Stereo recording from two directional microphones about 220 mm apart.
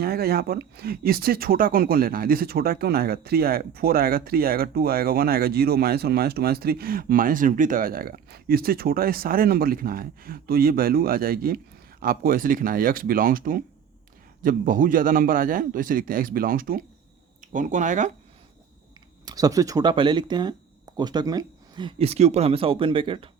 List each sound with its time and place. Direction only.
0.0 s a man's voice: 45° right (ahead or behind)
19.2 s speech: 15° right (ahead or behind)